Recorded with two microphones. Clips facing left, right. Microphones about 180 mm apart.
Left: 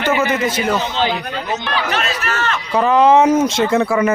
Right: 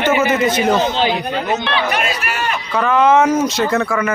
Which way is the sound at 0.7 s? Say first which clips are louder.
Right 3 dB; 15° right (ahead or behind).